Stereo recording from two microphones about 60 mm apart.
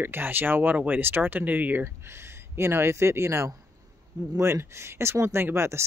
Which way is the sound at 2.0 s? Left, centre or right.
Right.